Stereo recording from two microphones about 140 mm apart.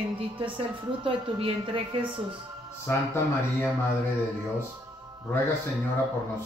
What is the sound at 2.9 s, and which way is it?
Speech, 15° left (ahead or behind).